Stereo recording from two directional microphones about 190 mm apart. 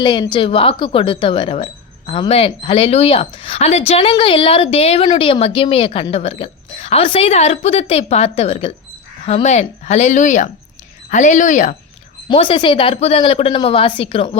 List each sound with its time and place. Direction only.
0.0 s speech: 25° left (ahead or behind); by 11.8 s 40° left (ahead or behind)
12.3 s a woman's voice: 25° left (ahead or behind)